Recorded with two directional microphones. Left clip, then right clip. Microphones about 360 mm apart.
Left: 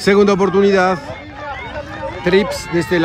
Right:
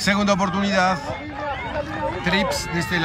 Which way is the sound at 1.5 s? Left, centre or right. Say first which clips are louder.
Left 1 dB; right.